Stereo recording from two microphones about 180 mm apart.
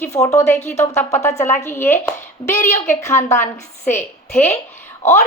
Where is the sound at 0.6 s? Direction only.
40° left (ahead or behind).